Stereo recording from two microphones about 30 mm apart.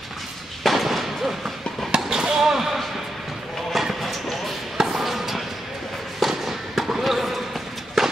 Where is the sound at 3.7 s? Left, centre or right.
Centre.